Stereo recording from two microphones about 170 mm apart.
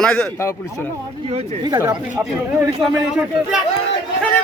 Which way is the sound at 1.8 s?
10° right (ahead or behind).